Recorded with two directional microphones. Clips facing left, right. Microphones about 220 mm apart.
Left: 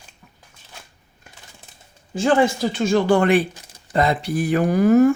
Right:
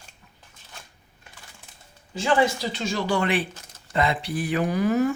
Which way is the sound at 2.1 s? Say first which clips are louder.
Left 4 dB; 50° left (ahead or behind).